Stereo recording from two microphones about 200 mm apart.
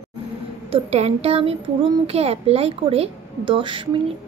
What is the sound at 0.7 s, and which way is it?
A woman's voice, 30° right (ahead or behind).